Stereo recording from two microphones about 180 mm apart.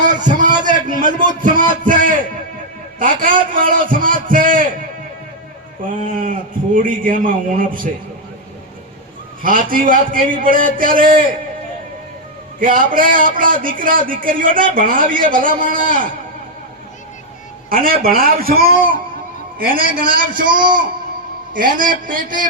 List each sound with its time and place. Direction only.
0.0 s a sound: 45° right (ahead or behind)
1.2 s a man's voice: 45° right (ahead or behind)
5.9 s a man's voice: 50° right (ahead or behind)
9.4 s a man's voice: 50° right (ahead or behind)
12.5 s a man's voice: 50° right (ahead or behind)
17.7 s a man's voice: 50° right (ahead or behind)
20.0 s a man's voice: 50° right (ahead or behind)
20.5 s a man's voice: 25° right (ahead or behind)
21.8 s a man's voice: 50° right (ahead or behind)